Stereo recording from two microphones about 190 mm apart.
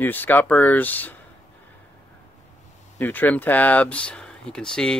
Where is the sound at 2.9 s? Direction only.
10° left (ahead or behind).